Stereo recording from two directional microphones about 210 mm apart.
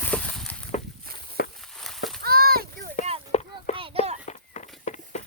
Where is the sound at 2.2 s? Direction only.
45° right (ahead or behind).